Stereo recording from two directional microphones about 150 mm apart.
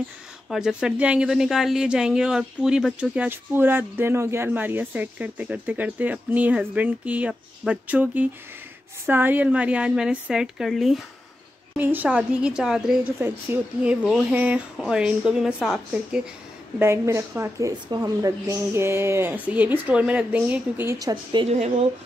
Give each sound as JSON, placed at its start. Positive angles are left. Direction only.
{"t": 0.5, "sound": "a woman's voice", "side_deg": -5}
{"t": 11.7, "sound": "a woman's voice", "side_deg": -10}
{"t": 13.2, "sound": "a woman's voice", "side_deg": -15}
{"t": 16.7, "sound": "a woman's voice", "side_deg": -15}
{"t": 21.1, "sound": "a woman's voice", "side_deg": -30}
{"t": 21.5, "sound": "speech", "side_deg": -45}